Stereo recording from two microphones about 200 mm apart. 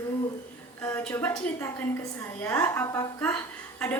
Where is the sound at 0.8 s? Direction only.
10° left (ahead or behind).